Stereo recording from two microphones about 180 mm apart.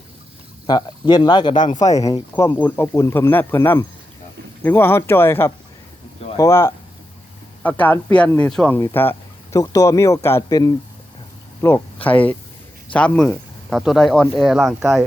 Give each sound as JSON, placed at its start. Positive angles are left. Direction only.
{"t": 0.7, "sound": "speech", "side_deg": 25}
{"t": 12.0, "sound": "speech", "side_deg": 10}